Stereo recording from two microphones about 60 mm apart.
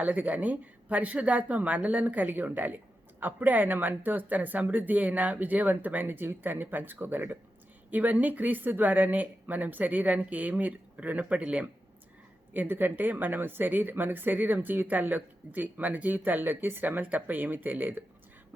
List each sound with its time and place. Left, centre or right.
0.0 s speech: right
12.5 s speech: right